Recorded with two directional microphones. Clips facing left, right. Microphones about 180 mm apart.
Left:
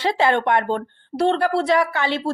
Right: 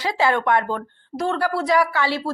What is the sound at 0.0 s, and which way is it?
A woman's voice, 25° left (ahead or behind).